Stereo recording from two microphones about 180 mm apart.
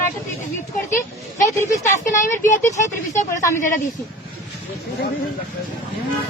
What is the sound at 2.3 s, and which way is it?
A woman's voice, 15° left (ahead or behind).